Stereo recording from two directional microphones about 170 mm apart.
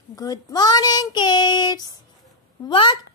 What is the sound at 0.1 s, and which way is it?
Speech, 20° left (ahead or behind).